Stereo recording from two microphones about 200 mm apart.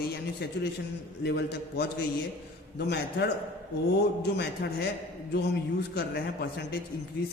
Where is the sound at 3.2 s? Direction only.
60° left (ahead or behind).